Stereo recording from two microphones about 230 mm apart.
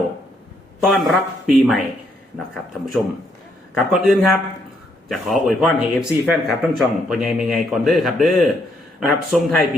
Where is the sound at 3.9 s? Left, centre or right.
Centre.